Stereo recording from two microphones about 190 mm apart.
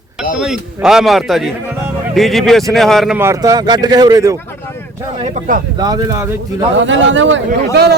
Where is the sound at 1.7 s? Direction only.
15° right (ahead or behind).